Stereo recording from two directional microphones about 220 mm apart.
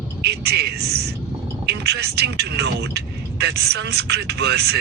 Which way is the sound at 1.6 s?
50° right (ahead or behind).